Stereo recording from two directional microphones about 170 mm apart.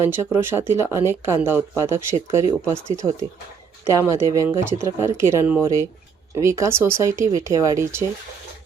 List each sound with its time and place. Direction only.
0.0 s speech: 15° right (ahead or behind)